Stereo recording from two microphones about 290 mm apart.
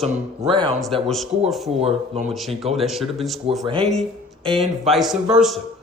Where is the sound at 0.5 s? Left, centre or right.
Centre.